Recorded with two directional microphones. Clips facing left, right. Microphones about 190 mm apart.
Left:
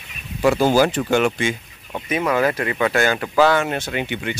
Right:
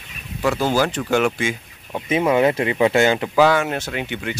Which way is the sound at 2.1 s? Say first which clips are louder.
Right 3 dB; 25° right (ahead or behind).